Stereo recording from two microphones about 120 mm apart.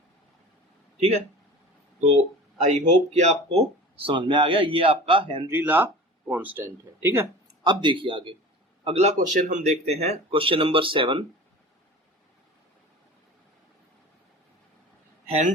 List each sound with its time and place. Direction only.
2.6 s speech: 85° right; by 5.5 s 45° right (ahead or behind)
5.5 s speech: 15° right (ahead or behind)
7.6 s speech: 40° right (ahead or behind)
8.8 s speech: 60° right (ahead or behind)
15.3 s a man's voice: 70° right (ahead or behind)